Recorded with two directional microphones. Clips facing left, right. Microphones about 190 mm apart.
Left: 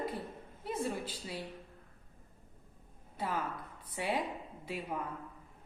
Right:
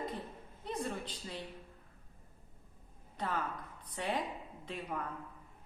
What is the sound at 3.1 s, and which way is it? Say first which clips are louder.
A woman's voice: left 1 dB; 10° left (ahead or behind).